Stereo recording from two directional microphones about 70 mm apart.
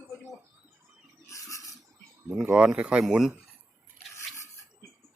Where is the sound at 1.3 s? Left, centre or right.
Left.